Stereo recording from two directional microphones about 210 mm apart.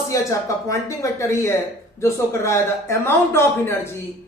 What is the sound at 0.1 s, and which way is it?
Speech, 15° left (ahead or behind).